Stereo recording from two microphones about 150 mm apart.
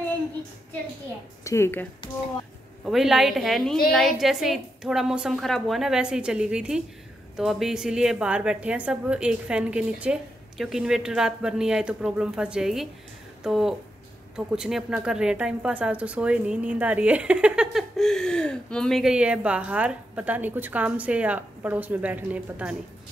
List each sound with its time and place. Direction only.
1.4 s speech: 20° left (ahead or behind)
2.8 s a woman's voice: centre (ahead or behind)